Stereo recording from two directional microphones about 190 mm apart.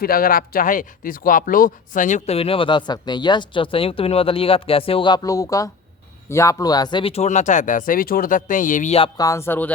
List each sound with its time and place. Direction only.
0.0 s speech: 50° left (ahead or behind)
9.1 s music: 15° left (ahead or behind)